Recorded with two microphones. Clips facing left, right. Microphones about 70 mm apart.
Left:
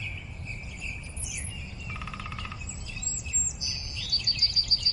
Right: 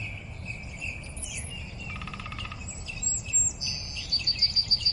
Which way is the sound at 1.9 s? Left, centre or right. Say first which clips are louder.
Left 1 dB; centre.